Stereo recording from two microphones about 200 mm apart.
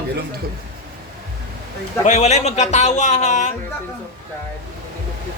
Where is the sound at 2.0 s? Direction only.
35° left (ahead or behind).